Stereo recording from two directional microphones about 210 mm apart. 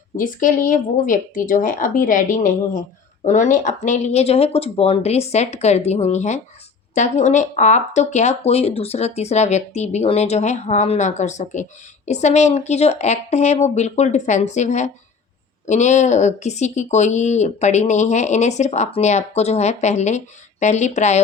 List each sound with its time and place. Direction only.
0.2 s speech: 40° left (ahead or behind)